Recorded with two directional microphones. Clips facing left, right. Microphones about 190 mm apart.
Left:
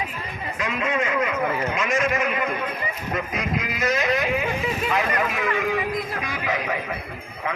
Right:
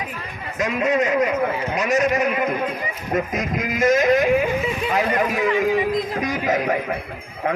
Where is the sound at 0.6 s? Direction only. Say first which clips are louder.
Right 6 dB; 40° right (ahead or behind).